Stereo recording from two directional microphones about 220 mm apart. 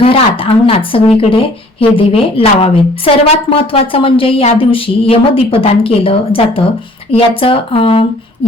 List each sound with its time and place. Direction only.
0.0 s a woman's voice: 25° left (ahead or behind)